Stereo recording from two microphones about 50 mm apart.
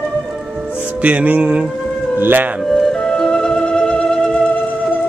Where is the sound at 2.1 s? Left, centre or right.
Right.